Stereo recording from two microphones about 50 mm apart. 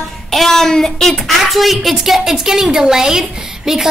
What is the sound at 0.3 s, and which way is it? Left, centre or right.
A child's voice, centre.